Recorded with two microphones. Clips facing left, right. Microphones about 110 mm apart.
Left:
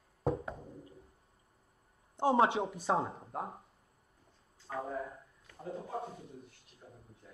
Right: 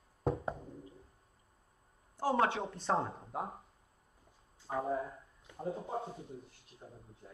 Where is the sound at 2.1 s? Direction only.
25° left (ahead or behind).